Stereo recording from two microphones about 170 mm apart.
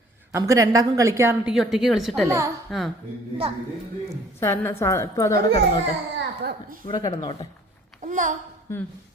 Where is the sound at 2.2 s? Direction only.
20° right (ahead or behind).